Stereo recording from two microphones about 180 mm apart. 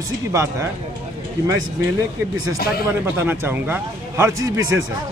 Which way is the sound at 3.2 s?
10° right (ahead or behind).